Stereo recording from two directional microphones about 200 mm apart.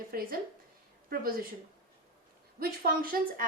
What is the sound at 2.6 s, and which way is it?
Speech, 45° right (ahead or behind).